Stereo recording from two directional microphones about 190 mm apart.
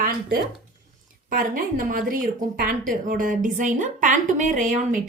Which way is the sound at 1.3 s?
45° right (ahead or behind).